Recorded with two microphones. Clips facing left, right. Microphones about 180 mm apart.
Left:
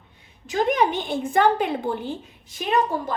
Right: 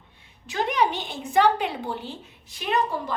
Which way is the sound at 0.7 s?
50° left (ahead or behind).